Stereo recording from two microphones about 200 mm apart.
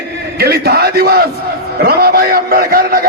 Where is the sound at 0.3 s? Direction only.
50° right (ahead or behind).